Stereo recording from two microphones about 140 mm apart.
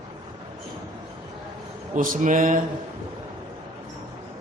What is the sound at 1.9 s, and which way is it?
Speech, 70° right (ahead or behind).